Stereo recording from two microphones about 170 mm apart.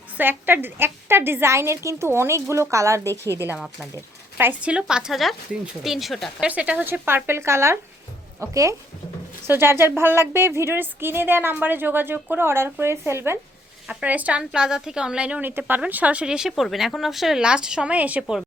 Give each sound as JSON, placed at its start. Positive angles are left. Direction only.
{"t": 0.2, "sound": "a woman's voice", "side_deg": -10}
{"t": 4.4, "sound": "a woman's voice", "side_deg": -10}